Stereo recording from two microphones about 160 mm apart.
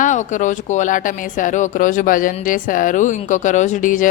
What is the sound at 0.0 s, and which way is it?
Speech, 50° left (ahead or behind).